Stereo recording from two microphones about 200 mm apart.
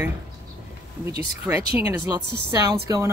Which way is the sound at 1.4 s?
15° right (ahead or behind).